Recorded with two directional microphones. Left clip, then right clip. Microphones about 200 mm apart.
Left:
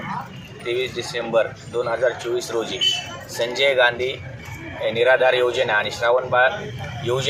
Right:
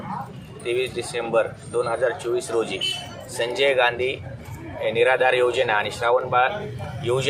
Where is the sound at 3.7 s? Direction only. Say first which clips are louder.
Left 3 dB; 5° right (ahead or behind).